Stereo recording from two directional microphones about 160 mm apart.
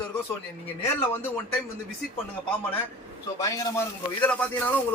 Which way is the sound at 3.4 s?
20° left (ahead or behind).